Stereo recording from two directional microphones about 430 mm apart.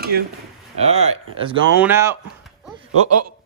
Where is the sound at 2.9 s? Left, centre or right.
Right.